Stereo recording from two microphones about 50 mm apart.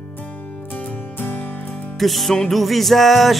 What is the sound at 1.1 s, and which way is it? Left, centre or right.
Music, left.